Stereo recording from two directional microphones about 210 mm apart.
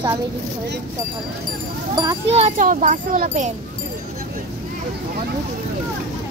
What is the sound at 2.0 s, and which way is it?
Speech, 25° right (ahead or behind).